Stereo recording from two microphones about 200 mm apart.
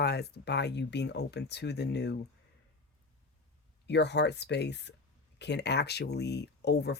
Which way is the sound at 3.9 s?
60° left (ahead or behind).